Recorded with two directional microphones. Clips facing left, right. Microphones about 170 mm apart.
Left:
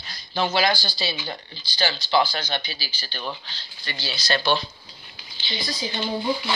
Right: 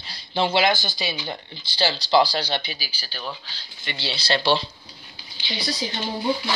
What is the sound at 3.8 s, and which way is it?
Speech, 25° right (ahead or behind).